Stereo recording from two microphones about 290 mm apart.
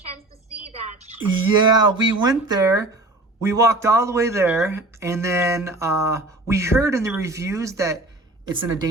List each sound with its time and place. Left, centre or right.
0.9 s speech: centre